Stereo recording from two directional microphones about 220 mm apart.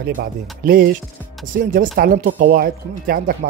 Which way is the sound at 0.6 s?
40° right (ahead or behind).